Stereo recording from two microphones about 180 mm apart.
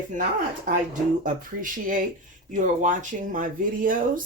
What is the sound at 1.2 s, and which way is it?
Speech, 50° right (ahead or behind).